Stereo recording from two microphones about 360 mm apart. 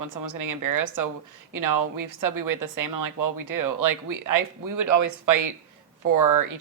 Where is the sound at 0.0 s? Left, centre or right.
Right.